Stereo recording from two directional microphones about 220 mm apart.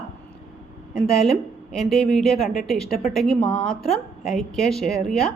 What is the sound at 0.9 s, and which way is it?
A woman's voice, centre (ahead or behind).